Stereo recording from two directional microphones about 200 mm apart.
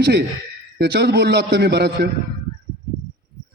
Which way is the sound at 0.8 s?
55° right (ahead or behind).